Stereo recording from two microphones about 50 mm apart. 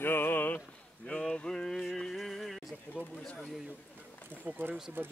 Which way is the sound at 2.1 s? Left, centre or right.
Centre.